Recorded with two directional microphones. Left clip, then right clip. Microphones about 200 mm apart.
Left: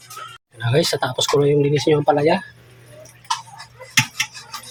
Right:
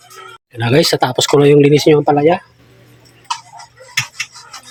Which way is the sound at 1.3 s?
50° right (ahead or behind).